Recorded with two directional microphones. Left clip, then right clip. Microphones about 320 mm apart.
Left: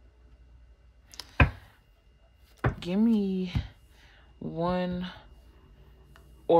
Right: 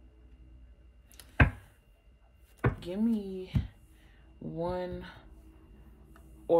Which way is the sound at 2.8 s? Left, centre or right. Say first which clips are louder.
Left 5 dB; centre.